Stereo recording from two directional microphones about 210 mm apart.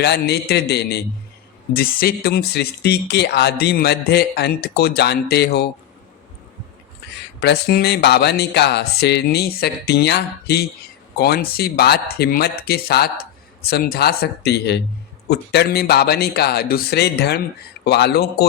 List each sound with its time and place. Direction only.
0.0 s speech: 50° left (ahead or behind)
7.4 s speech: 50° left (ahead or behind)